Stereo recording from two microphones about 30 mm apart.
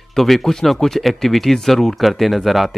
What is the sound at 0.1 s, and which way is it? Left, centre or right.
Speech, centre.